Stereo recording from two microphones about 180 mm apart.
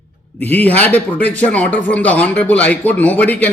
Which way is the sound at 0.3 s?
10° left (ahead or behind).